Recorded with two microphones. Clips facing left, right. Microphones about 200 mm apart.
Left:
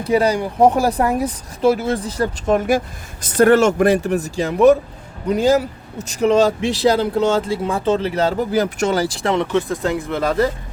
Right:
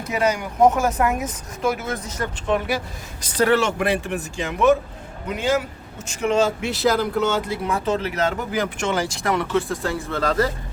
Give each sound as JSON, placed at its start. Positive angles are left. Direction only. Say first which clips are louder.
{"t": 0.0, "sound": "a man's voice", "louder": "left 6 dB", "side_deg": 30}